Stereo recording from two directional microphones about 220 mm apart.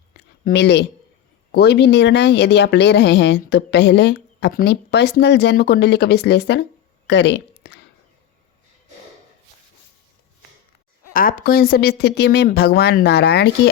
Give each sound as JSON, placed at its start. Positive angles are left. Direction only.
{"t": 0.1, "sound": "a sound", "side_deg": 50}
{"t": 1.5, "sound": "a woman's voice", "side_deg": 50}
{"t": 11.1, "sound": "a woman's voice", "side_deg": 40}